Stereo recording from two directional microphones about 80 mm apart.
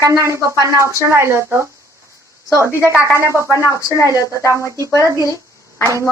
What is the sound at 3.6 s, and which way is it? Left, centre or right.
Speech, left.